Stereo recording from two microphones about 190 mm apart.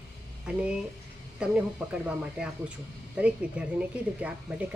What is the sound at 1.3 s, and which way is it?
Speech, 5° right (ahead or behind).